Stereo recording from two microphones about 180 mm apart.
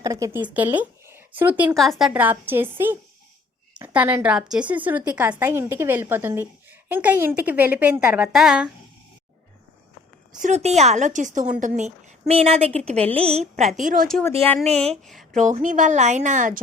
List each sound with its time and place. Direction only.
0.0 s speech: 20° right (ahead or behind)
1.7 s a woman's voice: centre (ahead or behind)
10.4 s a woman's voice: 40° right (ahead or behind)
13.7 s speech: 45° right (ahead or behind)
14.1 s speech: 10° left (ahead or behind)
15.4 s speech: 45° right (ahead or behind)